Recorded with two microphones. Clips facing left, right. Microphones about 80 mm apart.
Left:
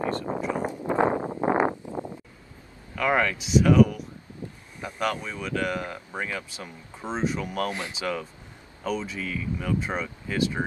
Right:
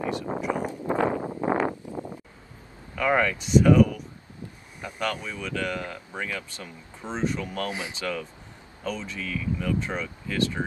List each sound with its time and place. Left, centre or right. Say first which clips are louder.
0.1 s speech: even; centre
0.6 s a sound: left 4 dB; centre
3.0 s speech: even; centre